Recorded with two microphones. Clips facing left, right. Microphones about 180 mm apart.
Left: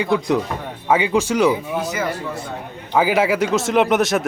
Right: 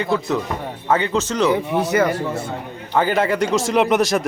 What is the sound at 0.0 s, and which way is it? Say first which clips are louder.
Speech: left 2 dB; 15° left (ahead or behind).